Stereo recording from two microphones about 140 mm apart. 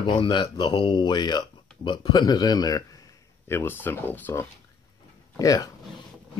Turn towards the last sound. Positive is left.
turn(degrees=25)  # may be behind; listen again after turning